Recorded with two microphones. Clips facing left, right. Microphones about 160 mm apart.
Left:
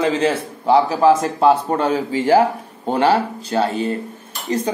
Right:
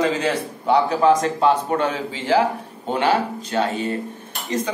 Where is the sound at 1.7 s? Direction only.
35° left (ahead or behind).